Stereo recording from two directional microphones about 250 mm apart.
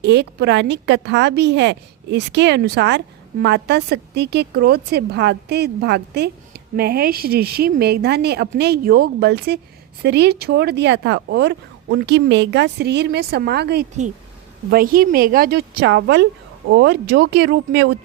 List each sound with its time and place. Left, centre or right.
0.0 s a woman's voice: right